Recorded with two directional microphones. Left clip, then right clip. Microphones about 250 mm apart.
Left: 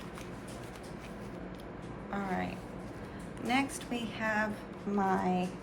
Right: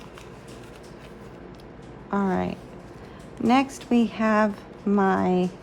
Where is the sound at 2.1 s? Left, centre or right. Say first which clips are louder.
Right 10 dB; right.